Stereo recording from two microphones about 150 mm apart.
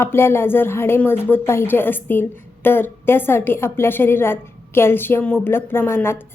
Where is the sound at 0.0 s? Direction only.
15° left (ahead or behind).